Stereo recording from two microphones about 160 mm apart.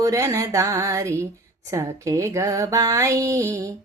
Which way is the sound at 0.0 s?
20° right (ahead or behind).